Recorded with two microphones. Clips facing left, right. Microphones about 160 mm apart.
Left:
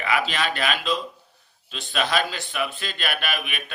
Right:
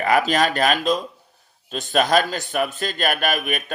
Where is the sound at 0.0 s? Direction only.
45° right (ahead or behind).